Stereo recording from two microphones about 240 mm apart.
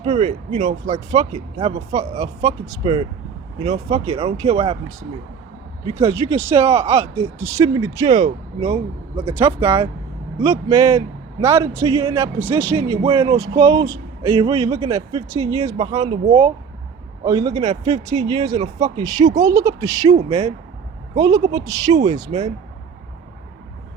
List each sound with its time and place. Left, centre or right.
0.0 s a man's voice: right
6.0 s a man's voice: centre
10.7 s a man's voice: centre
12.7 s a man's voice: right
20.1 s speech: right
21.2 s a man's voice: centre
22.3 s speech: right